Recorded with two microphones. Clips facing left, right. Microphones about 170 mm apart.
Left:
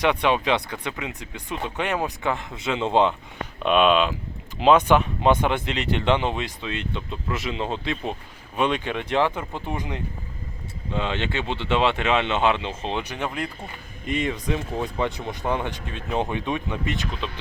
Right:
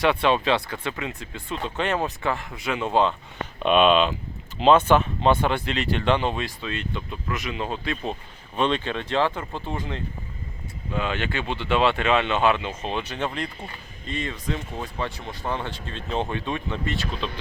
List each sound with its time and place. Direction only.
0.0 s speech: 20° left (ahead or behind)
3.6 s speech: 5° left (ahead or behind)